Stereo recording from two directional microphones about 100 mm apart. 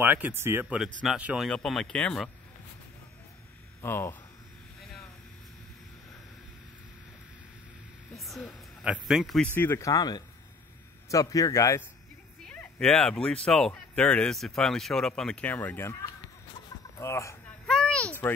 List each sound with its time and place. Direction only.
0.0 s speech: 20° right (ahead or behind)
1.0 s speech: 10° right (ahead or behind)
1.5 s speech: 5° left (ahead or behind)
3.8 s speech: 25° left (ahead or behind)
8.1 s a sound: centre (ahead or behind)
9.0 s speech: centre (ahead or behind)
9.4 s speech: 20° left (ahead or behind)
9.8 s speech: 35° left (ahead or behind)
12.4 s a sound: 10° left (ahead or behind)
13.2 s speech: 10° left (ahead or behind); by 17.4 s 30° left (ahead or behind)
17.6 s a sound: 5° left (ahead or behind)